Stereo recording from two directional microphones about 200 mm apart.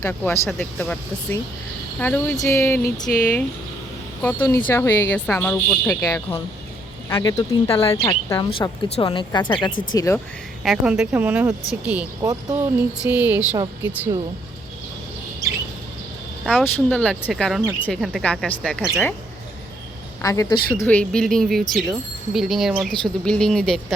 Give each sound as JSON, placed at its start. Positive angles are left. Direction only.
{"t": 0.0, "sound": "speech", "side_deg": 10}
{"t": 7.1, "sound": "speech", "side_deg": 20}
{"t": 10.6, "sound": "speech", "side_deg": 0}
{"t": 12.2, "sound": "speech", "side_deg": -20}
{"t": 16.5, "sound": "speech", "side_deg": 5}
{"t": 20.2, "sound": "speech", "side_deg": 15}